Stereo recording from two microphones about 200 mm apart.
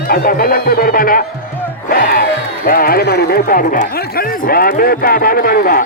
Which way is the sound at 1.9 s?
50° left (ahead or behind).